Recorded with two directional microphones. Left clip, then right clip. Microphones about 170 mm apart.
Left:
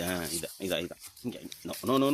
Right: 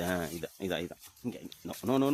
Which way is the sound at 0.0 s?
30° right (ahead or behind).